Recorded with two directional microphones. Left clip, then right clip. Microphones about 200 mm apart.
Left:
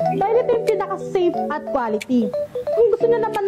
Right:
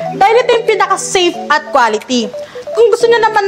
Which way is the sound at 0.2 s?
10° right (ahead or behind).